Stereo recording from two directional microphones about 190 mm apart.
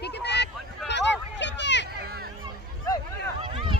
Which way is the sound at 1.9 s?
55° right (ahead or behind).